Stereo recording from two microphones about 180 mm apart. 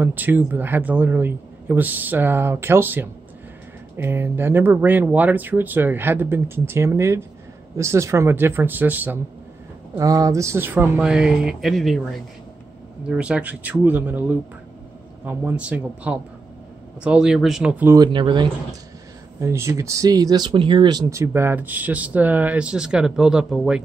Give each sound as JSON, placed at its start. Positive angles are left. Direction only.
{"t": 0.0, "sound": "speech", "side_deg": -10}
{"t": 17.9, "sound": "speech", "side_deg": -25}